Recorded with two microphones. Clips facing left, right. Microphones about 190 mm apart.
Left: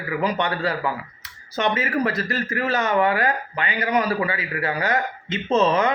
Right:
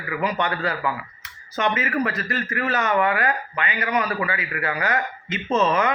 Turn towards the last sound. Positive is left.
turn(degrees=35)  # may be behind; listen again after turning